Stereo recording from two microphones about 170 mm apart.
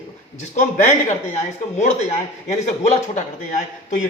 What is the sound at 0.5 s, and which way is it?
Speech, 45° left (ahead or behind).